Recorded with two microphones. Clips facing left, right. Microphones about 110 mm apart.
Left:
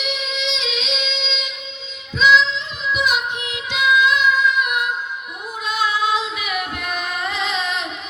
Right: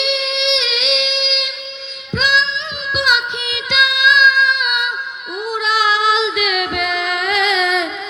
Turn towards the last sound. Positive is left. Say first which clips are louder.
# right 7 dB
turn(degrees=-90)